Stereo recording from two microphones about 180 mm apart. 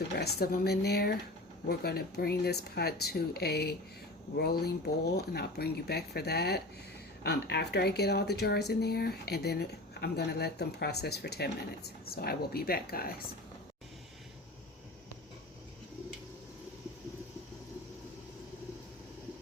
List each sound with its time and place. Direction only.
0.2 s speech: 60° left (ahead or behind)